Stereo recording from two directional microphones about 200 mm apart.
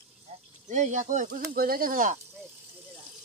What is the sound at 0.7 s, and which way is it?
Speech, 35° right (ahead or behind).